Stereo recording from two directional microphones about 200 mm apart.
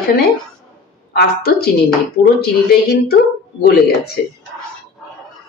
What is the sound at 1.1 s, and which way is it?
Speech, 50° left (ahead or behind).